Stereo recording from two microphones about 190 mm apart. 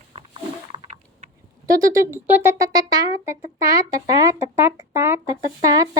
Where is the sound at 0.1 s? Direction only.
30° right (ahead or behind).